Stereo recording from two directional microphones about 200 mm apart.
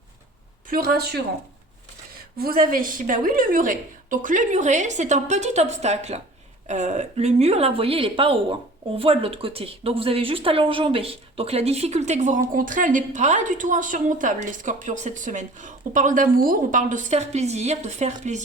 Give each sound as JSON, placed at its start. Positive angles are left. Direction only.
{"t": 0.7, "sound": "a woman's voice", "side_deg": -50}
{"t": 2.4, "sound": "speech", "side_deg": -45}